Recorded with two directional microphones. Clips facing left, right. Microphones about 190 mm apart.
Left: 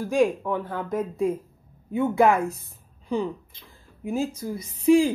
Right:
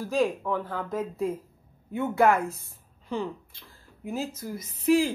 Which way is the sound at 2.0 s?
15° left (ahead or behind).